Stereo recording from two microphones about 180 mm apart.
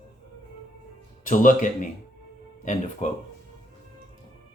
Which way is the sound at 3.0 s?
40° left (ahead or behind).